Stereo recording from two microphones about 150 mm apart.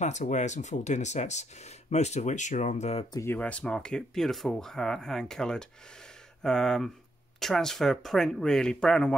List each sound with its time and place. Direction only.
0.0 s speech: 50° left (ahead or behind)
3.1 s speech: 20° left (ahead or behind)
3.3 s speech: 10° left (ahead or behind)